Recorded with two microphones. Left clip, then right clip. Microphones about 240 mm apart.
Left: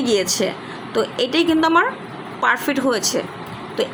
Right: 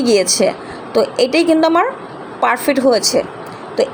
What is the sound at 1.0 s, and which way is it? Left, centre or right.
A woman's voice, centre.